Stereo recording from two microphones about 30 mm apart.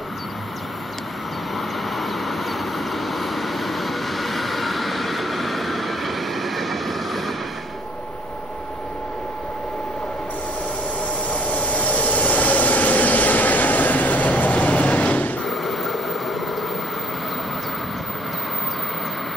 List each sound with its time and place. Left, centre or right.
2.0 s vehicle: centre
11.5 s vehicle: left
15.4 s train: centre